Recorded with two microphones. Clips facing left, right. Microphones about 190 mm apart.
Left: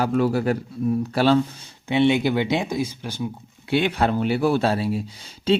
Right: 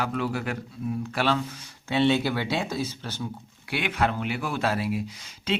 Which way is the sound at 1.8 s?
15° left (ahead or behind).